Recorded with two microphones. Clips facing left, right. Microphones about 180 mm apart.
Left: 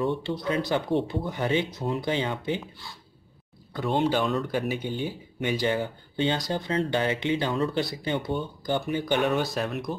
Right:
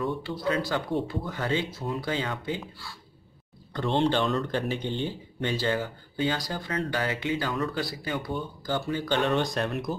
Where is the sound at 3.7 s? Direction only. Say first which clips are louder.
Even; 10° left (ahead or behind).